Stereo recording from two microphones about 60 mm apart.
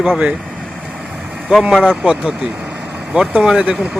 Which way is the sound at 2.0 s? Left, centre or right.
Centre.